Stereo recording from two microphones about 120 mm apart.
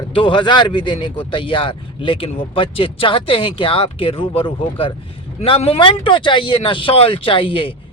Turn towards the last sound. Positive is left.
turn(degrees=45)  # may be behind; listen again after turning